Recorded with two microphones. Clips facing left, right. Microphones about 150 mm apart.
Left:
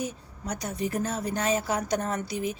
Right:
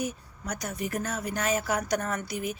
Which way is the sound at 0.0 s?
30° left (ahead or behind).